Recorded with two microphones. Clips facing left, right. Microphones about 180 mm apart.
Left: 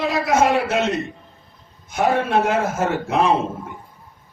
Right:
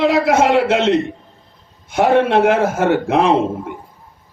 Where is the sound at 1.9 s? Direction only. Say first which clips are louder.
Right 5 dB; 60° right (ahead or behind).